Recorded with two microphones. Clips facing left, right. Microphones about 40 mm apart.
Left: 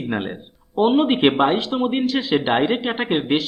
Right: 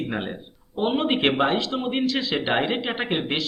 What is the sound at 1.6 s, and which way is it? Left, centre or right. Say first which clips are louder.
Speech: left 4 dB; left.